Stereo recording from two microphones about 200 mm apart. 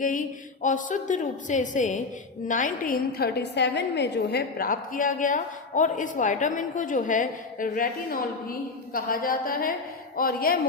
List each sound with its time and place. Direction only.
0.0 s a woman's voice: 40° left (ahead or behind)